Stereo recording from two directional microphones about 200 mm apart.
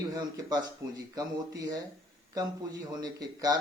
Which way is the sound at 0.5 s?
20° right (ahead or behind).